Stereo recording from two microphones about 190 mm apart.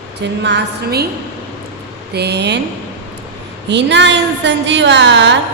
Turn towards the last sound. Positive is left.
turn(degrees=-70)  # may be behind; listen again after turning